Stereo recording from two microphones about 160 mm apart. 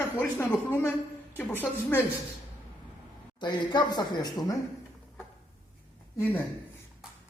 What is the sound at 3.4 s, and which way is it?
A man's voice, 30° left (ahead or behind).